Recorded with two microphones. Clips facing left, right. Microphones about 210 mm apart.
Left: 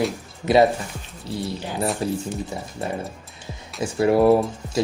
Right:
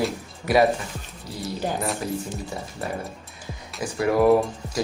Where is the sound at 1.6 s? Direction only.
45° right (ahead or behind).